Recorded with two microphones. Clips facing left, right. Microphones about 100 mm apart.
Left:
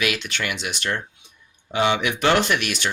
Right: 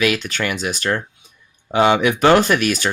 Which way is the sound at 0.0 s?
40° right (ahead or behind).